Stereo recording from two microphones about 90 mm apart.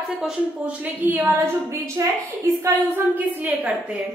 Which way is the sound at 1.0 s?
20° right (ahead or behind).